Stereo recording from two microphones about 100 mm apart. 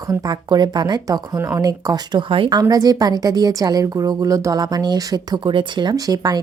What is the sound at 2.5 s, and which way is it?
Speech, 40° right (ahead or behind).